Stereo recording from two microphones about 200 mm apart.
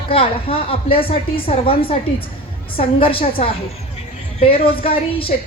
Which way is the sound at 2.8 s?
25° left (ahead or behind).